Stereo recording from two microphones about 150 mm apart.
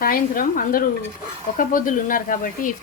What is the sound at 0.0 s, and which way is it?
Speech, 70° left (ahead or behind).